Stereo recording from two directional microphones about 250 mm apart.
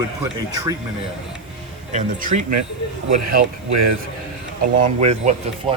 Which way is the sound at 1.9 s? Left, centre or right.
Right.